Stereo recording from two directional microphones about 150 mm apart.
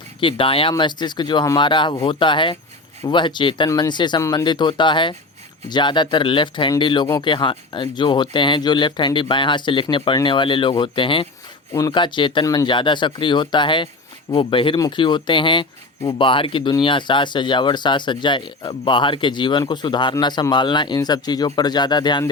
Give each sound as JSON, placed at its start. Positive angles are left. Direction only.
{"t": 0.2, "sound": "speech", "side_deg": 35}
{"t": 11.7, "sound": "speech", "side_deg": 25}